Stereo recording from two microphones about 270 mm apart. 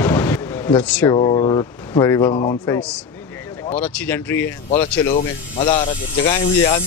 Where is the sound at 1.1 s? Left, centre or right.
Centre.